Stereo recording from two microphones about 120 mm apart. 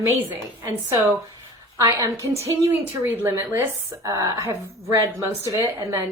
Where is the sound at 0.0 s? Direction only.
20° right (ahead or behind).